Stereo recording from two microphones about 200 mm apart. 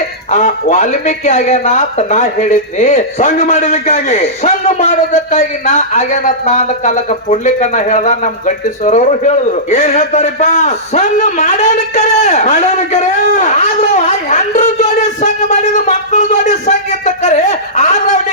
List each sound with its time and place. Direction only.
0.3 s a man's voice: 35° left (ahead or behind)